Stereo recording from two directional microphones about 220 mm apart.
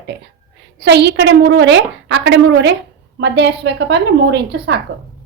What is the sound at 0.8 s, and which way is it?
A woman's voice, 50° right (ahead or behind).